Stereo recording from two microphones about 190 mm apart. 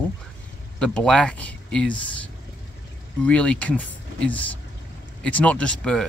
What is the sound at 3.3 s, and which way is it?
Speech, 5° left (ahead or behind).